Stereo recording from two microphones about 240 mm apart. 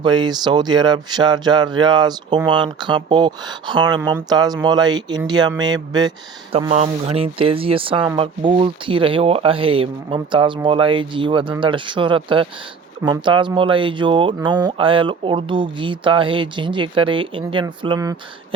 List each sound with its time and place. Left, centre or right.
0.0 s speech: centre